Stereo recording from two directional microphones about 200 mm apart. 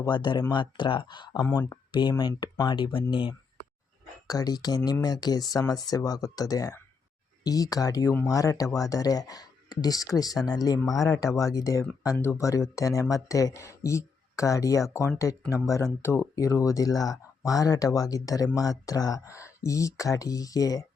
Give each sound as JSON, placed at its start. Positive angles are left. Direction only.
{"t": 0.0, "sound": "speech", "side_deg": 20}
{"t": 1.4, "sound": "speech", "side_deg": 10}